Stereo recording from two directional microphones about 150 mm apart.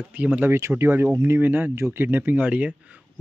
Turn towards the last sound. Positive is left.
turn(degrees=-10)  # may be behind; listen again after turning